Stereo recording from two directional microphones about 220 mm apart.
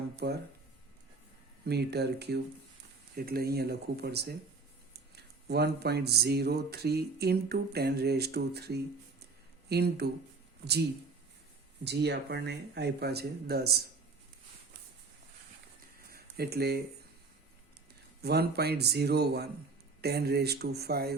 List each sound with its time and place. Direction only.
0.2 s speech: 45° right (ahead or behind)
1.6 s speech: 50° right (ahead or behind)
11.8 s speech: 50° right (ahead or behind)
16.1 s speech: 45° right (ahead or behind)
18.2 s speech: 45° right (ahead or behind)